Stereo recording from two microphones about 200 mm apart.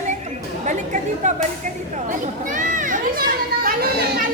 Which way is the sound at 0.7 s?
35° right (ahead or behind).